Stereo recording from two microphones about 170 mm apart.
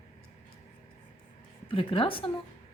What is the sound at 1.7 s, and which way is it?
Speech, 30° left (ahead or behind).